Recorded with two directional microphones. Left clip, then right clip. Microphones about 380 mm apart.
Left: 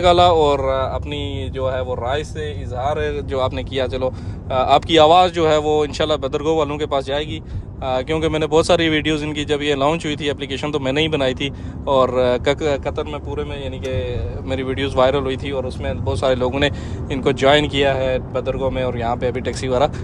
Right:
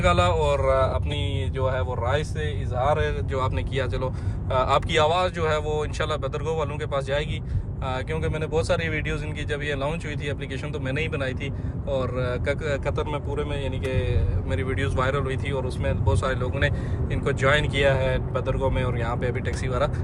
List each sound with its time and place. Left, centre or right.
0.0 s speech: centre